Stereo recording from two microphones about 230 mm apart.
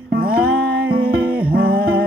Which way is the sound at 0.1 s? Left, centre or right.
Right.